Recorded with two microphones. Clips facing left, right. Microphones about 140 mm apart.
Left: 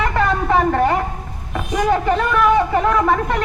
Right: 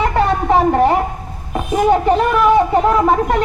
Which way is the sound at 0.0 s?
30° right (ahead or behind).